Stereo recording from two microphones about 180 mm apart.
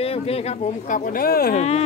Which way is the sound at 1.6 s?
35° left (ahead or behind).